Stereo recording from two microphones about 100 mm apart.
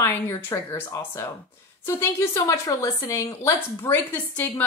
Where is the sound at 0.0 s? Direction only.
25° left (ahead or behind).